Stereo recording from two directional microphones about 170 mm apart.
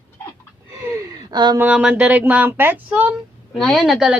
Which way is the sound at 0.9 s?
20° right (ahead or behind).